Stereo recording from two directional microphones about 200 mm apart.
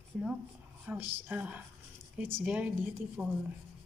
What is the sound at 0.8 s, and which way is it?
Speech, 10° right (ahead or behind).